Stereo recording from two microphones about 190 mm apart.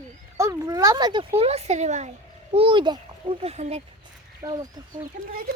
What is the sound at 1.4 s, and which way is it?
A child's voice, 35° right (ahead or behind).